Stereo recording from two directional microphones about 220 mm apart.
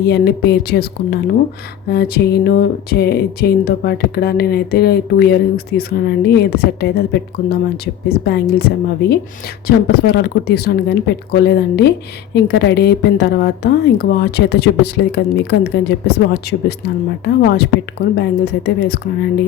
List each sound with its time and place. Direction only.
0.0 s speech: 45° left (ahead or behind)
8.2 s speech: 45° left (ahead or behind)